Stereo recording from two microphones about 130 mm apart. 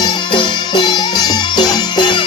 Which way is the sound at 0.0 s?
35° left (ahead or behind).